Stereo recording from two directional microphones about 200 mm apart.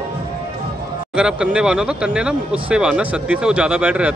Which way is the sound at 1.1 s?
5° right (ahead or behind).